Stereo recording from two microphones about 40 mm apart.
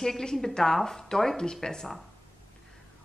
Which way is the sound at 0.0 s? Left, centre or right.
Centre.